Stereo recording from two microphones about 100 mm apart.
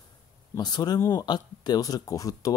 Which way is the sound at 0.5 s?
45° left (ahead or behind).